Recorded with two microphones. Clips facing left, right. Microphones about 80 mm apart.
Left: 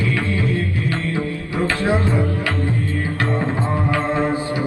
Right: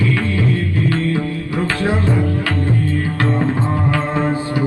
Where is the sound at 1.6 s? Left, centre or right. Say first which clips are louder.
Left 1 dB; left.